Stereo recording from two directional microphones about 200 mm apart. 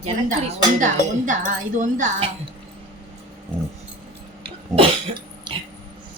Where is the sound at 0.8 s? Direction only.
40° right (ahead or behind).